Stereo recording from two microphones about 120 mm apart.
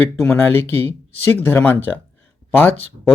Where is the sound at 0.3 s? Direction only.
20° left (ahead or behind).